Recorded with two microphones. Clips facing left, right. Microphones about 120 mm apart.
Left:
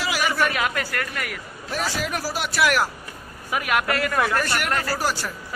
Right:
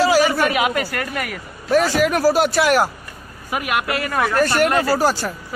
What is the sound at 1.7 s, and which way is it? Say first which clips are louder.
Speech: right 11 dB; 55° right (ahead or behind).